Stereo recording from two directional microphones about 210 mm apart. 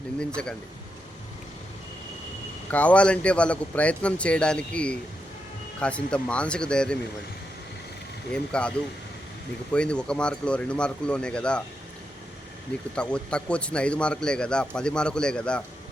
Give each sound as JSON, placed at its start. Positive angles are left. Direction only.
{"t": 0.2, "sound": "a man's voice", "side_deg": 5}
{"t": 2.7, "sound": "a man's voice", "side_deg": 5}
{"t": 8.3, "sound": "a man's voice", "side_deg": 5}
{"t": 9.7, "sound": "a man's voice", "side_deg": 5}
{"t": 13.0, "sound": "a man's voice", "side_deg": 5}